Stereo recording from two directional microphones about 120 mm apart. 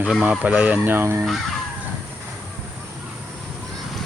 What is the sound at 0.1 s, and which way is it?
Speech, 10° right (ahead or behind).